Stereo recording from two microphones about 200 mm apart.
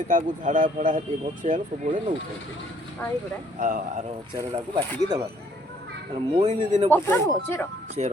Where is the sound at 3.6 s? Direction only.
40° right (ahead or behind).